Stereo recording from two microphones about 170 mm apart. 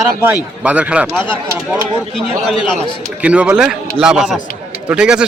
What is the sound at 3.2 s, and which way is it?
Speech, 5° right (ahead or behind).